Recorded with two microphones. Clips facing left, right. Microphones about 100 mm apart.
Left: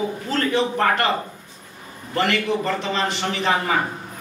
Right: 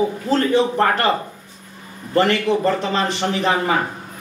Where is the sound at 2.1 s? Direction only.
40° right (ahead or behind).